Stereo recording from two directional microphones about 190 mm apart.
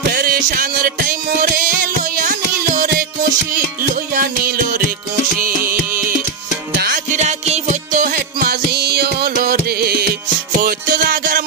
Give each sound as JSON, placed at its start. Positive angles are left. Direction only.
{"t": 0.1, "sound": "music", "side_deg": -50}
{"t": 2.1, "sound": "carnatic music", "side_deg": -45}
{"t": 3.5, "sound": "music", "side_deg": -45}